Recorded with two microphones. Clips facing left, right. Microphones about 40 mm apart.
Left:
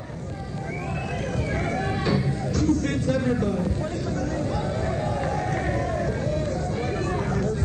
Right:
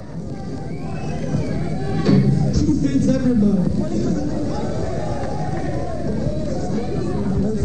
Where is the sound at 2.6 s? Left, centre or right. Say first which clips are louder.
Right 3 dB; left.